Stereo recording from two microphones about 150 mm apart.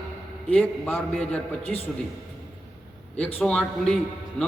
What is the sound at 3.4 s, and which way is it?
Speech, 5° left (ahead or behind).